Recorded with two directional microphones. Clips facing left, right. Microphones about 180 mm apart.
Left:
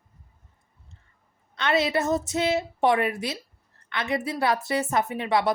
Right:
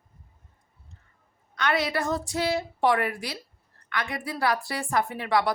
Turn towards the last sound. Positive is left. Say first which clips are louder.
# left 2 dB
turn(degrees=20)  # may be behind; listen again after turning